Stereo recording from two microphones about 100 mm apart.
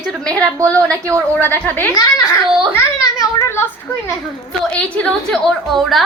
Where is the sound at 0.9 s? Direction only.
30° right (ahead or behind).